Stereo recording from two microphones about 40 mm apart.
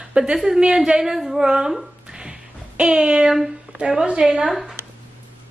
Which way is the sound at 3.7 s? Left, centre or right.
Right.